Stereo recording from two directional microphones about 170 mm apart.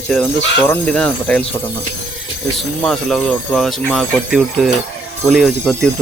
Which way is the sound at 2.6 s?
Centre (ahead or behind).